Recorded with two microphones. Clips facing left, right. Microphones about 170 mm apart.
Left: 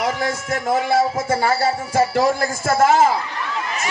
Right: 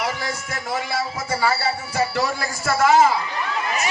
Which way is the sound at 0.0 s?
50° left (ahead or behind).